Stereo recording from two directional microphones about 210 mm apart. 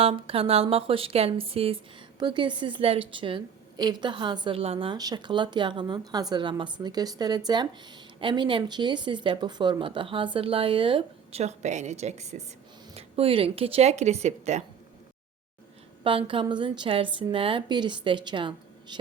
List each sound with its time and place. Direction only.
0.0 s a woman's voice: 25° right (ahead or behind)
16.0 s a woman's voice: 25° right (ahead or behind)